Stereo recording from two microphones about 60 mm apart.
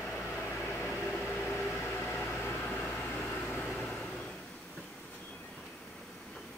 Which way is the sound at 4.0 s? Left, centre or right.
Centre.